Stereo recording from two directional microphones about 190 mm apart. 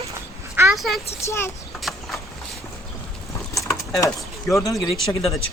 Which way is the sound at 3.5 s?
15° left (ahead or behind).